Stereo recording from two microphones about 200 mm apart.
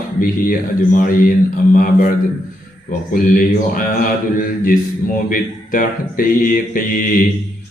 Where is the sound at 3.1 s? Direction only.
45° left (ahead or behind).